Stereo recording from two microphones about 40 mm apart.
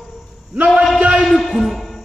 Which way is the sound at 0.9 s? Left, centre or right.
Right.